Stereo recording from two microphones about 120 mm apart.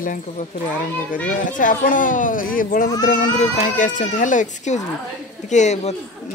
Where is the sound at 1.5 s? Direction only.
90° left; by 5.9 s 75° left (ahead or behind).